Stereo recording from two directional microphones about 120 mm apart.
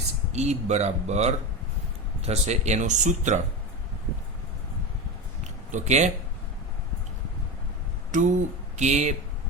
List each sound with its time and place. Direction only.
0.3 s speech: 70° right (ahead or behind); by 3.4 s 90° right
5.7 s speech: 75° right (ahead or behind)
8.1 s speech: 90° right; by 9.1 s 70° right (ahead or behind)